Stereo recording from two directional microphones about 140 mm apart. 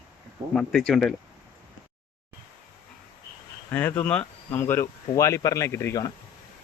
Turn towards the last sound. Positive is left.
turn(degrees=25)  # may be behind; listen again after turning